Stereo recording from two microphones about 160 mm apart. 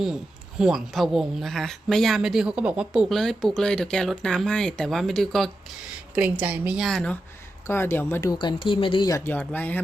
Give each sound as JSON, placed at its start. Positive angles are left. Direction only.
{"t": 0.6, "sound": "speech", "side_deg": 0}
{"t": 6.4, "sound": "speech", "side_deg": -10}
{"t": 6.8, "sound": "speech", "side_deg": 5}